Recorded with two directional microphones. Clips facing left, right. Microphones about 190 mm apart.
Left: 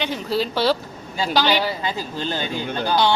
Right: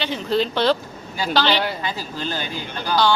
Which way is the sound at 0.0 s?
5° left (ahead or behind).